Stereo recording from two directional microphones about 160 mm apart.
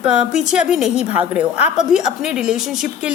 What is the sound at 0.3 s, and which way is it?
Speech, 5° right (ahead or behind).